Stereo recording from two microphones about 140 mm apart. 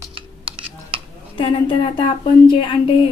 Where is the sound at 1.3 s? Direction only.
35° left (ahead or behind).